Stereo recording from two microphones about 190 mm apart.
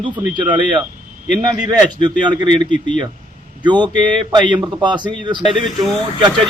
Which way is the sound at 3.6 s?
25° right (ahead or behind).